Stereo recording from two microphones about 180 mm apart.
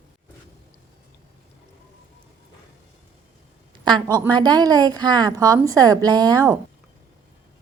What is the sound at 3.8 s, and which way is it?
A woman's voice, 25° right (ahead or behind).